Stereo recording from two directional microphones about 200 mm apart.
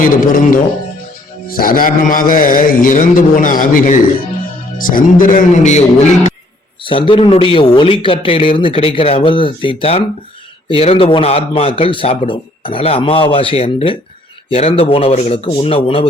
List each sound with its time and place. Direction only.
0.0 s mantra: 45° left (ahead or behind)
4.8 s a man's voice: 45° left (ahead or behind); by 16.0 s 25° left (ahead or behind)